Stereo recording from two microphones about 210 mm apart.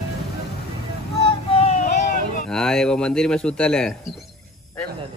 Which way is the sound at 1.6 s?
30° left (ahead or behind).